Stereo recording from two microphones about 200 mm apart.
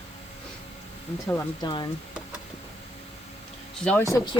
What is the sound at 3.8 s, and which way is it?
Speech, 10° left (ahead or behind).